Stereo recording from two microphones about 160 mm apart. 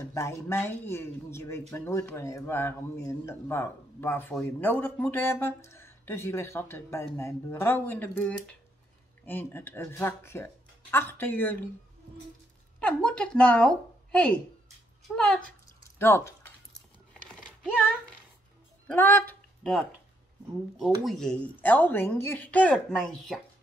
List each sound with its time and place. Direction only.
0.1 s a man's voice: 20° left (ahead or behind)
12.8 s speech: 5° left (ahead or behind)
18.9 s a sound: 10° left (ahead or behind)
20.7 s a man's voice: centre (ahead or behind)